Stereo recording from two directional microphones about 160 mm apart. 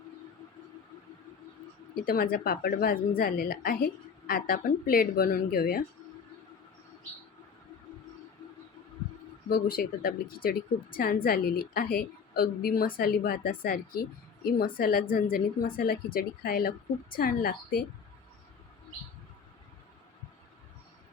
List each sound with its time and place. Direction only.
2.0 s a woman's voice: 70° left (ahead or behind)
9.5 s a woman's voice: 65° left (ahead or behind)